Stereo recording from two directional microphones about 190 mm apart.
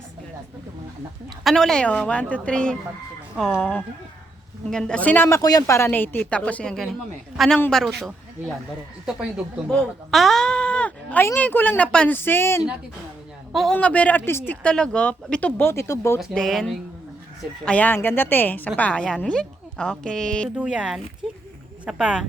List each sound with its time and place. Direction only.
1.5 s a woman's voice: 5° left (ahead or behind)
9.6 s speech: centre (ahead or behind)
13.5 s a woman's voice: centre (ahead or behind)
20.6 s a woman's voice: 5° right (ahead or behind)